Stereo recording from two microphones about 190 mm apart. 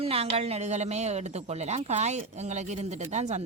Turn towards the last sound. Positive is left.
turn(degrees=-35)  # may be behind; listen again after turning